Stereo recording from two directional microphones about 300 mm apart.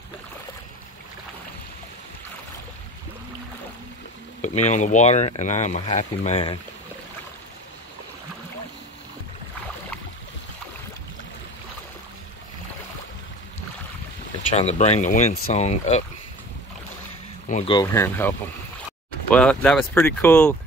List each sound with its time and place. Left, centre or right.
4.6 s speech: left
14.5 s speech: left
17.5 s speech: centre